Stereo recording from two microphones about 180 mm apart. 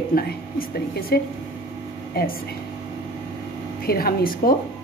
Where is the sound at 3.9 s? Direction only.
55° left (ahead or behind).